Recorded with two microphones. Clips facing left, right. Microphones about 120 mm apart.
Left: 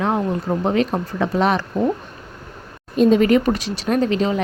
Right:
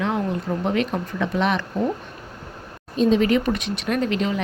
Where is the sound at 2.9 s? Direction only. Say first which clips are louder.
Left 4 dB; 50° left (ahead or behind).